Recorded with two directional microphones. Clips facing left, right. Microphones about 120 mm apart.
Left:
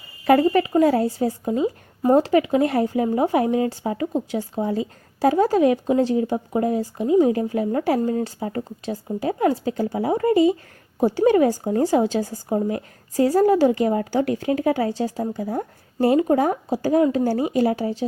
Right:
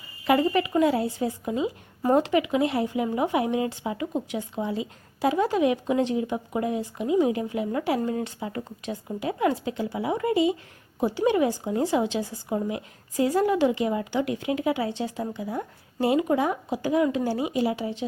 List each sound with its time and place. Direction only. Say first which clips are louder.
0.3 s a woman's voice: left 5 dB; 40° left (ahead or behind)